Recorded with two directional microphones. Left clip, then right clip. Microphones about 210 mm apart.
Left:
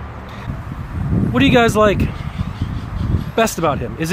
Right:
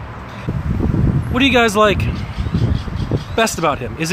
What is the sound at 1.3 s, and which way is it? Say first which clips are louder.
Speech: even; 15° left (ahead or behind).